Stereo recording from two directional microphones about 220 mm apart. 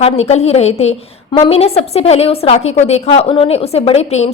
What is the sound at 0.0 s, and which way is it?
A woman's voice, 30° left (ahead or behind).